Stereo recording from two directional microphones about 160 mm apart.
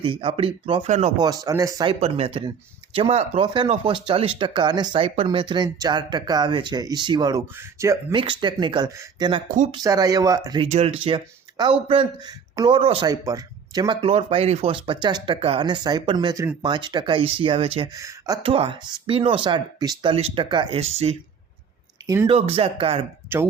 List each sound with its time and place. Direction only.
0.0 s speech: 35° right (ahead or behind)
0.9 s speech: 50° right (ahead or behind)
1.2 s speech: 20° right (ahead or behind)
1.9 s speech: 40° right (ahead or behind); by 7.9 s 20° right (ahead or behind)
8.1 s speech: 30° right (ahead or behind)
10.6 s speech: 40° right (ahead or behind)
13.1 s speech: 25° right (ahead or behind)
17.9 s speech: 20° right (ahead or behind)
18.4 s speech: 35° right (ahead or behind)
22.0 s speech: 20° right (ahead or behind)
22.3 s speech: 40° right (ahead or behind)
23.3 s speech: 15° right (ahead or behind)